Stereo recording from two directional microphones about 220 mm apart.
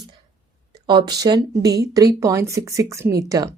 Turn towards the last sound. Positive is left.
turn(degrees=-15)  # may be behind; listen again after turning